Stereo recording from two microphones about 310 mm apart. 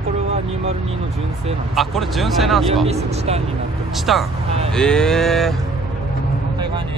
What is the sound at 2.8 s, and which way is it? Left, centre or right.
Speech, right.